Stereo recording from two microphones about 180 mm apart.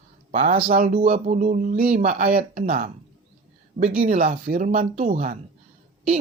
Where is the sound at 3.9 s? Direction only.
50° right (ahead or behind).